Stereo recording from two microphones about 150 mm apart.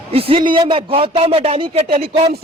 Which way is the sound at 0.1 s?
40° right (ahead or behind).